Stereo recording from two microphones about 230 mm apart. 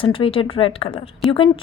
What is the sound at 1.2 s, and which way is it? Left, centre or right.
Speech, centre.